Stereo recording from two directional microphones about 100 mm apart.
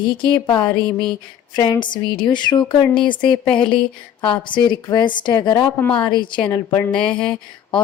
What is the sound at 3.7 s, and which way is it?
Speech, 55° left (ahead or behind).